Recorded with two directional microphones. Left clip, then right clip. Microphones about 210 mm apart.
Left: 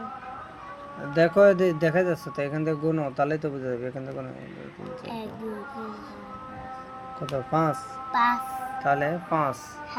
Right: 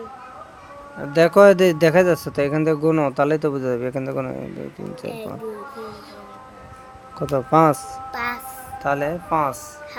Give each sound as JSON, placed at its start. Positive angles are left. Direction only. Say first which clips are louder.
{"t": 1.1, "sound": "speech", "louder": "right 6 dB", "side_deg": -30}
{"t": 7.2, "sound": "speech", "louder": "right 10 dB", "side_deg": -35}
{"t": 8.8, "sound": "speech", "louder": "right 3 dB", "side_deg": -25}